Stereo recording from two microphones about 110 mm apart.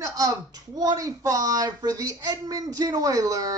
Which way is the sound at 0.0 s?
30° right (ahead or behind).